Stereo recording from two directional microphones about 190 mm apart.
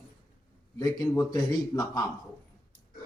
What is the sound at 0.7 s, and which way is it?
A man's voice, 20° left (ahead or behind).